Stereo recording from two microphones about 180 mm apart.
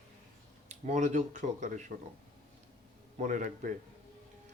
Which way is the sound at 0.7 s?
40° right (ahead or behind).